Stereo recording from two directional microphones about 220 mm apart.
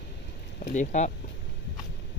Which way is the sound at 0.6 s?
35° left (ahead or behind).